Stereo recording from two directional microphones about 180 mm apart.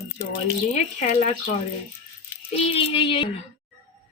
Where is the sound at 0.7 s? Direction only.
45° left (ahead or behind).